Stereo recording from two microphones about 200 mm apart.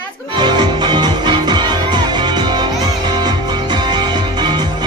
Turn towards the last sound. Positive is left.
turn(degrees=-20)  # may be behind; listen again after turning